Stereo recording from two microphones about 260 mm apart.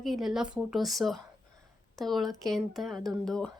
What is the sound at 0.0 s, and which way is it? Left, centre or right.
Speech, centre.